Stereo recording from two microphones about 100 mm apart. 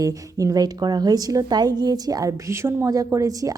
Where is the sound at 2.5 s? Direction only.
25° right (ahead or behind).